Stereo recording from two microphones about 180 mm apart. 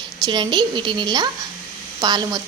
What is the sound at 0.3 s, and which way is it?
A woman's voice, 25° right (ahead or behind).